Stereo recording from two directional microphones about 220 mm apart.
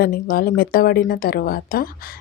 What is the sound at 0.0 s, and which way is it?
Speech, 40° left (ahead or behind).